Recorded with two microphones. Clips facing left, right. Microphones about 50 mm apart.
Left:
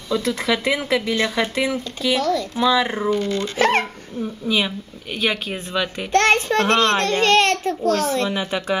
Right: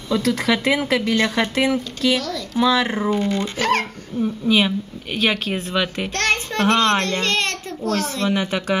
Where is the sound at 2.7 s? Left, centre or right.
Centre.